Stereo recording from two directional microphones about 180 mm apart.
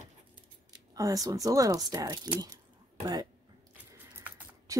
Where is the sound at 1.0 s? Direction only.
20° right (ahead or behind).